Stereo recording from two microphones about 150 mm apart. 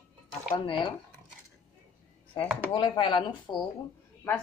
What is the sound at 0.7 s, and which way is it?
Speech, 35° left (ahead or behind).